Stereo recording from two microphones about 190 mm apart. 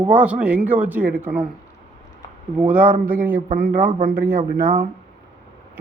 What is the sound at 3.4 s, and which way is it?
Speech, 45° right (ahead or behind).